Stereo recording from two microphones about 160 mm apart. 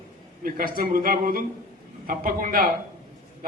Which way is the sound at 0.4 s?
60° right (ahead or behind).